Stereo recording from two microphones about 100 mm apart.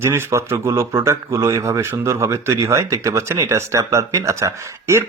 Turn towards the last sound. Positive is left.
turn(degrees=-30)  # may be behind; listen again after turning